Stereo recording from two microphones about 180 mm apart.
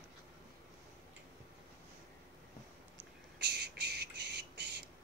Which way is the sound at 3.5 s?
65° right (ahead or behind).